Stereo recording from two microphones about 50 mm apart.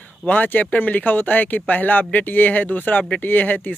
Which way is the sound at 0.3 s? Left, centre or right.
Left.